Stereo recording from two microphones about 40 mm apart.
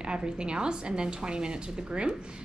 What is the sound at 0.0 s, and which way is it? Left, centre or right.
A woman's voice, right.